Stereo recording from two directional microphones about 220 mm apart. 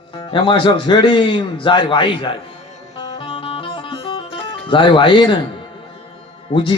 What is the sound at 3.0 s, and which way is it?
Music, 20° left (ahead or behind).